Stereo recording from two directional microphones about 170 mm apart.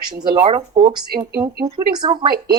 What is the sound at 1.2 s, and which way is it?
Speech, 15° right (ahead or behind).